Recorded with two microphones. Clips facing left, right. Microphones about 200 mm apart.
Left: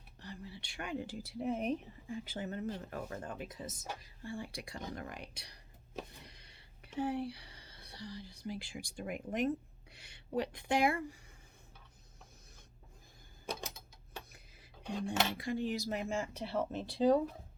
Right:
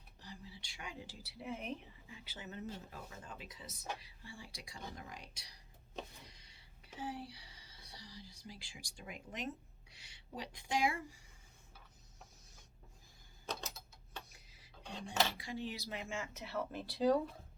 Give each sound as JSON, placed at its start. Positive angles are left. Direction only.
{"t": 0.2, "sound": "speech", "side_deg": 60}
{"t": 13.5, "sound": "mechanisms", "side_deg": 10}
{"t": 14.3, "sound": "a sound", "side_deg": 55}
{"t": 15.4, "sound": "speech", "side_deg": 55}